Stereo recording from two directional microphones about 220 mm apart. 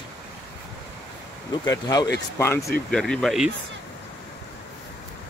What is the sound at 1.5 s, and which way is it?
Speech, 15° left (ahead or behind).